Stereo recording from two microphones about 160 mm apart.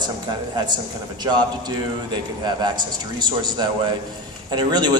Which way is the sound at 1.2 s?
30° right (ahead or behind).